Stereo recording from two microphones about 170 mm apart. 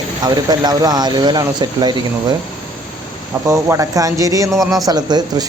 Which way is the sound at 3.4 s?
15° right (ahead or behind).